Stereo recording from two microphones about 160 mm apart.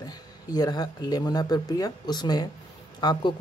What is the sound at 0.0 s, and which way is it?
A man's voice, 25° left (ahead or behind).